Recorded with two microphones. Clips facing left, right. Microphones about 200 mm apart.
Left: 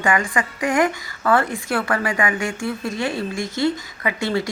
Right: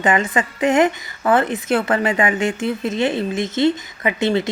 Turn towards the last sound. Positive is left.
turn(degrees=-20)  # may be behind; listen again after turning